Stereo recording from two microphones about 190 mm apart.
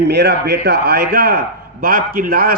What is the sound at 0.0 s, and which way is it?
A man's voice, 65° right (ahead or behind).